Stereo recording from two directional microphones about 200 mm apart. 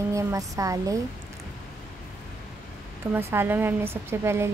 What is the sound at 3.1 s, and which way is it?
Speech, 10° right (ahead or behind).